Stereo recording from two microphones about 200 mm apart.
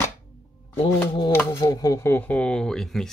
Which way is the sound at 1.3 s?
10° left (ahead or behind).